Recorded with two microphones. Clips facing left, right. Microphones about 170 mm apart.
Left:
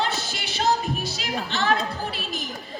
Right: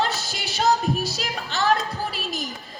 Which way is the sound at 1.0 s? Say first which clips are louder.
Even; 40° right (ahead or behind).